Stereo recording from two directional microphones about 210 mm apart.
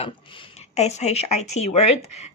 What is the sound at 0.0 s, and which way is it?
Speech, 25° left (ahead or behind).